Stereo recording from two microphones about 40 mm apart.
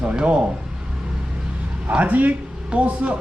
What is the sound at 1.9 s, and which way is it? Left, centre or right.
Speech, right.